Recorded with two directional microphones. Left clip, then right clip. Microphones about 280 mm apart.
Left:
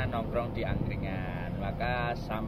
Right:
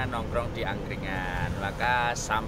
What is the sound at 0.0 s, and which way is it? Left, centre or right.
Speech, centre.